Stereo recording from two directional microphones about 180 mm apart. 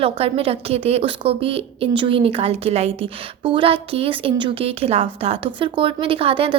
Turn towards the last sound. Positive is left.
turn(degrees=-30)  # may be behind; listen again after turning